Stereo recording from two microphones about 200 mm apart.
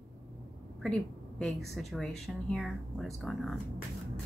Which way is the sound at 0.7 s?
Centre (ahead or behind).